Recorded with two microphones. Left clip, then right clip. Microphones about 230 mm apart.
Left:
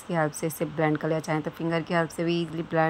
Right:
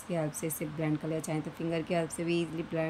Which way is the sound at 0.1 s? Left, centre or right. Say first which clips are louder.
Left 7 dB; left.